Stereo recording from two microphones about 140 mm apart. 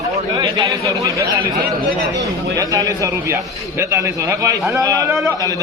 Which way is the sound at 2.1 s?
25° right (ahead or behind).